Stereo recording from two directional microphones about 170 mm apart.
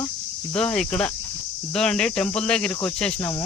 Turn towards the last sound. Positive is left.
turn(degrees=5)  # may be behind; listen again after turning